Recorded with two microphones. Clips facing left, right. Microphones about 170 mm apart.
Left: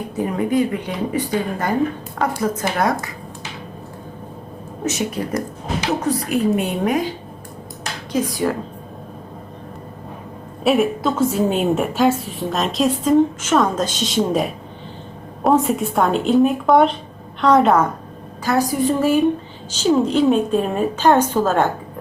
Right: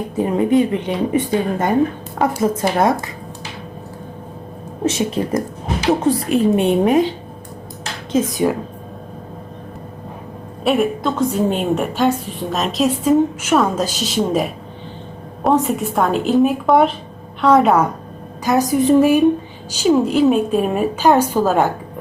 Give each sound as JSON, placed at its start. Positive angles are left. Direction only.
{"t": 0.2, "sound": "speech", "side_deg": -25}
{"t": 4.9, "sound": "speech", "side_deg": -25}
{"t": 8.1, "sound": "speech", "side_deg": -20}
{"t": 10.6, "sound": "a woman's voice", "side_deg": 0}
{"t": 18.4, "sound": "a woman's voice", "side_deg": -20}